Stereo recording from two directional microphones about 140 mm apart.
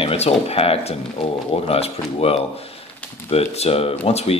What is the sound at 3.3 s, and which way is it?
Speech, 45° left (ahead or behind).